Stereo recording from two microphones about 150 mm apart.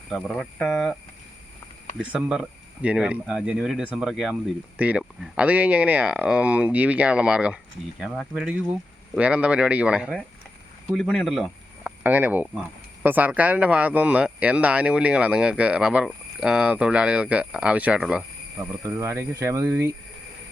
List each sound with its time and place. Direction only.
0.3 s speech: 5° left (ahead or behind)
2.0 s speech: 5° right (ahead or behind)
18.6 s speech: 20° right (ahead or behind)